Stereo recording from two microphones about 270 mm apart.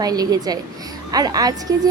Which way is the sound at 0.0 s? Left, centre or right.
Centre.